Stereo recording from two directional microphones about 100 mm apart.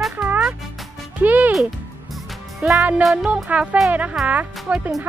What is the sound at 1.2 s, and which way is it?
Speech, 15° right (ahead or behind).